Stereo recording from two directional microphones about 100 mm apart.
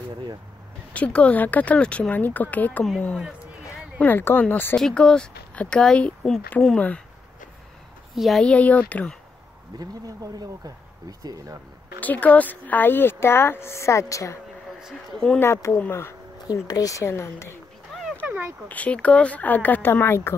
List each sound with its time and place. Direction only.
0.9 s speech: 10° left (ahead or behind)
4.0 s speech: 20° left (ahead or behind)
4.7 s speech: 5° left (ahead or behind)
8.1 s speech: centre (ahead or behind)
8.5 s speech: 15° left (ahead or behind)
9.8 s speech: 40° right (ahead or behind)
12.0 s speech: 15° left (ahead or behind); by 14.4 s 30° left (ahead or behind)
14.8 s speech: 5° right (ahead or behind)
15.3 s speech: 25° left (ahead or behind)
16.6 s speech: 35° left (ahead or behind)
18.2 s a sound: 15° right (ahead or behind)
18.7 s speech: 15° left (ahead or behind)